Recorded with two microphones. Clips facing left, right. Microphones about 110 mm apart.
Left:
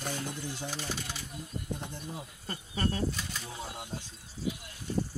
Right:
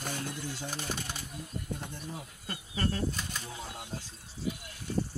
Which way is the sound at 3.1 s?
45° right (ahead or behind).